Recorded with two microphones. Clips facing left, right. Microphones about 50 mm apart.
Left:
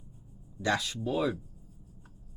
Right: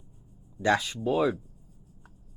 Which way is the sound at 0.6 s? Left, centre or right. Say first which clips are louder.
Right 5 dB; right.